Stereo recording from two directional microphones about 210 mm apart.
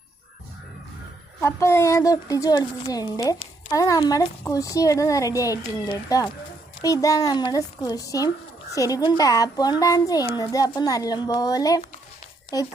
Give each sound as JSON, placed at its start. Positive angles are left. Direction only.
{"t": 1.4, "sound": "a woman's voice", "side_deg": 10}